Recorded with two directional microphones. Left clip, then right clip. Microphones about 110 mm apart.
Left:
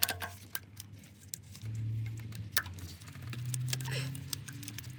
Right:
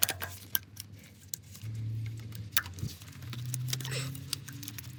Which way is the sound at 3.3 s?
15° right (ahead or behind).